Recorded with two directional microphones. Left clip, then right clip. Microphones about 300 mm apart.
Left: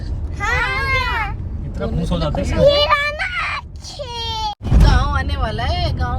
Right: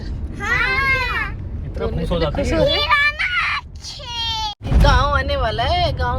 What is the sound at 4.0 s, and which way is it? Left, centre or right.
Baby cry, left.